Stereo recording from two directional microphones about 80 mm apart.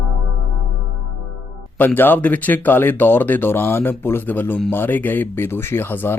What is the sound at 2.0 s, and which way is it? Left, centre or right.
Speech, left.